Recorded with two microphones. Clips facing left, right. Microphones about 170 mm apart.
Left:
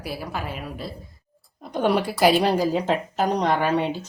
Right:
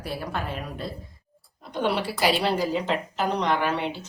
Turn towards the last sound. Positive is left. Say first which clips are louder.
# left 3 dB
turn(degrees=45)  # may be behind; listen again after turning